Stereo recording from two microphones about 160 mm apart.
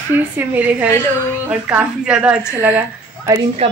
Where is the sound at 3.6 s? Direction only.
35° right (ahead or behind).